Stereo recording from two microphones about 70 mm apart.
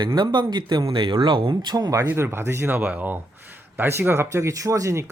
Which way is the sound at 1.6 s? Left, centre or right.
Right.